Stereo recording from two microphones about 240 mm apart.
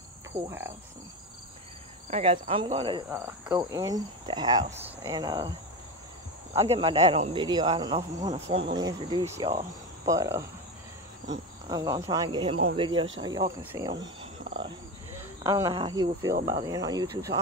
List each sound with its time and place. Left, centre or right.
0.5 s cricket: centre
2.0 s speech: right
3.1 s cricket: centre
6.5 s speech: right
10.0 s cricket: centre
11.7 s cricket: centre
12.7 s speech: centre
13.6 s cricket: centre
14.0 s a sound: right
15.4 s cricket: centre